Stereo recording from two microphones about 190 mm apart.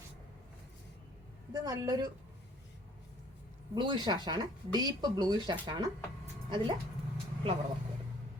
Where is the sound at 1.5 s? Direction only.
20° right (ahead or behind).